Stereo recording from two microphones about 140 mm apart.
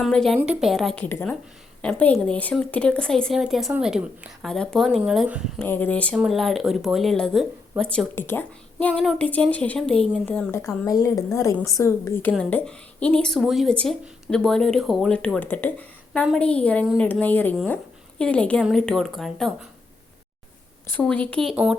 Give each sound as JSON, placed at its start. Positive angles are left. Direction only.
{"t": 0.0, "sound": "speech", "side_deg": 0}
{"t": 0.3, "sound": "speech", "side_deg": -10}
{"t": 5.5, "sound": "speech", "side_deg": 10}
{"t": 10.7, "sound": "a woman's voice", "side_deg": 25}
{"t": 20.8, "sound": "speech", "side_deg": 10}
{"t": 21.5, "sound": "speech", "side_deg": -10}